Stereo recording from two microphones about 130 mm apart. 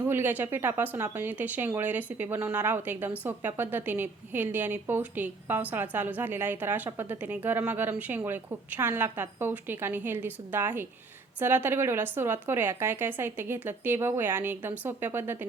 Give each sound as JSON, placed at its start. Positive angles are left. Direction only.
{"t": 0.0, "sound": "a woman's voice", "side_deg": -15}